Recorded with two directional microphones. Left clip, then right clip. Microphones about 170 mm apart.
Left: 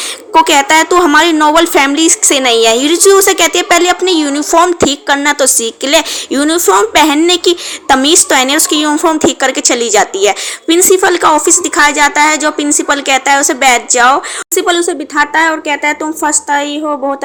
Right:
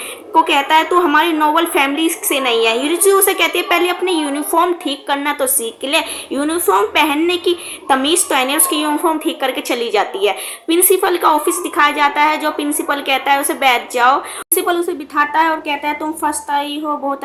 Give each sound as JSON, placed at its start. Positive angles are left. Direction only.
{"t": 0.3, "sound": "a woman's voice", "side_deg": 55}